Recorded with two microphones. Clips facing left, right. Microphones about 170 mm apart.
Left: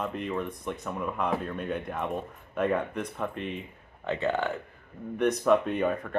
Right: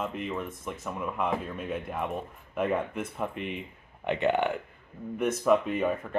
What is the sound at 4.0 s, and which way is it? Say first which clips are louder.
Speech: right 2 dB; 15° right (ahead or behind).